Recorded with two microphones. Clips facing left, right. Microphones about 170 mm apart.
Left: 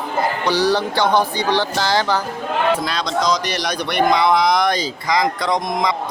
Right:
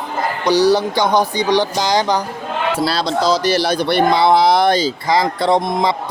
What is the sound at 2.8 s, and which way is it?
Speech, 35° right (ahead or behind).